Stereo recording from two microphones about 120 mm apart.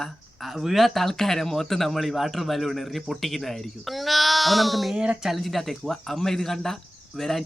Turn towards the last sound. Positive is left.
turn(degrees=0)  # may be behind; listen again after turning